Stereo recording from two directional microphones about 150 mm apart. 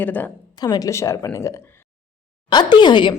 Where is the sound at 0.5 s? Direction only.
25° left (ahead or behind).